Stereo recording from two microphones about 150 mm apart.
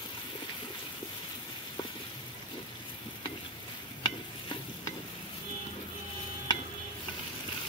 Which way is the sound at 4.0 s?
30° left (ahead or behind).